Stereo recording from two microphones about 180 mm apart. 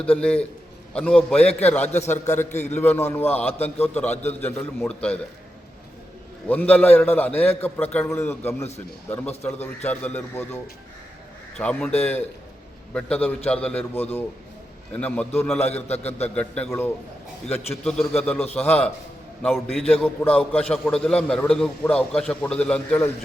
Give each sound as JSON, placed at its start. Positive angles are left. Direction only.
{"t": 0.0, "sound": "a man's voice", "side_deg": 5}
{"t": 2.5, "sound": "a man's voice", "side_deg": 40}
{"t": 2.7, "sound": "a man's voice", "side_deg": 10}
{"t": 6.5, "sound": "a man's voice", "side_deg": 10}
{"t": 15.5, "sound": "a man's voice", "side_deg": 35}
{"t": 16.3, "sound": "a man's voice", "side_deg": 5}